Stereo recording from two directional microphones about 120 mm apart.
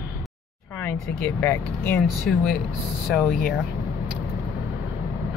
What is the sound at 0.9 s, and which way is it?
Speech, 15° left (ahead or behind).